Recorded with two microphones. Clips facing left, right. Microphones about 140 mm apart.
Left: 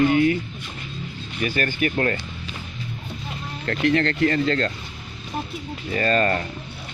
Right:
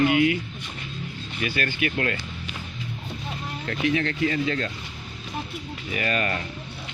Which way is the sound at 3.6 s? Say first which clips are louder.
Left 4 dB; 60° left (ahead or behind).